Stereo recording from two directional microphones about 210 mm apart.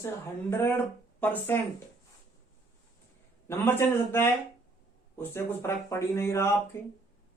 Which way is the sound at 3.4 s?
10° left (ahead or behind).